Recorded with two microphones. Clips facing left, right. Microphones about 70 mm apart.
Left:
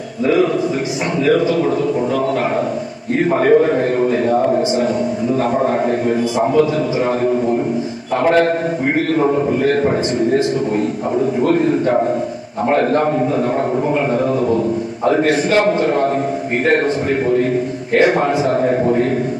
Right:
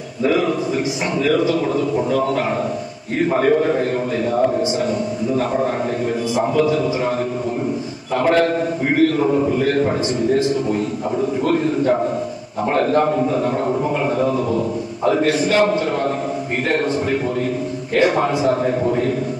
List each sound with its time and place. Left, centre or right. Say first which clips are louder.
8.1 s a man's voice: left 2 dB; left
11.4 s a man's voice: left 4 dB; left
12.7 s a man's voice: left 1 dB; left